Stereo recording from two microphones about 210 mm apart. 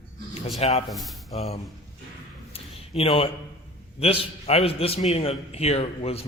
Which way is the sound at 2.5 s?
25° left (ahead or behind).